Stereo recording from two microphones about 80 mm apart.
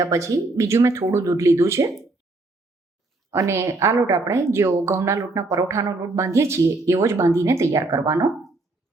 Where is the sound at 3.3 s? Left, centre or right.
Right.